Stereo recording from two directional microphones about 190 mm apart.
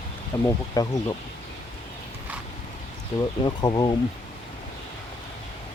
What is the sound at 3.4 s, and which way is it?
Speech, 25° left (ahead or behind).